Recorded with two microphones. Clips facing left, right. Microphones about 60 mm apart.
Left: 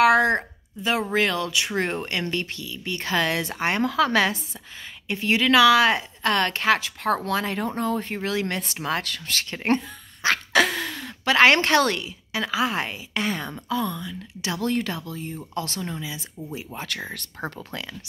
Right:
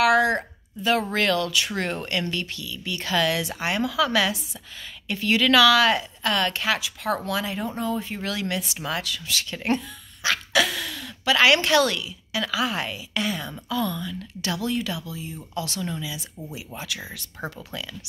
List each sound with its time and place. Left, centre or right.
0.0 s a sound: left
0.9 s speech: centre; by 4.4 s left
5.0 s a woman's voice: left
7.5 s speech: left
8.2 s speech: left
13.7 s a woman's voice: left
14.6 s speech: left